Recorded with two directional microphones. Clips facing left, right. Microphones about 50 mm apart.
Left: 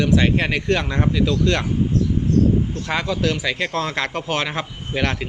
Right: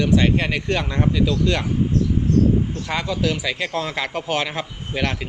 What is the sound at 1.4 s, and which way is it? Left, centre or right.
Speech, centre.